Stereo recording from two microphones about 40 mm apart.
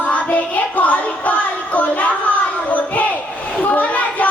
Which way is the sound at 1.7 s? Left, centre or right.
Left.